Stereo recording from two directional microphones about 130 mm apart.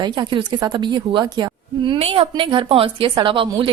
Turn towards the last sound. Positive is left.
turn(degrees=-40)  # may be behind; listen again after turning